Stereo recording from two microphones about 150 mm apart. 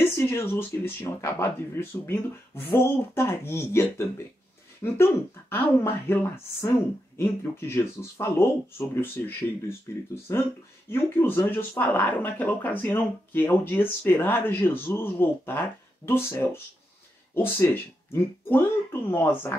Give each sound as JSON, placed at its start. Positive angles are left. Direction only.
{"t": 0.0, "sound": "speech", "side_deg": 15}
{"t": 4.8, "sound": "speech", "side_deg": 15}